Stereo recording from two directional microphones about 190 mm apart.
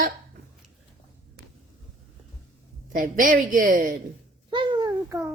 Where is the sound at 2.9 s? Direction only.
45° right (ahead or behind).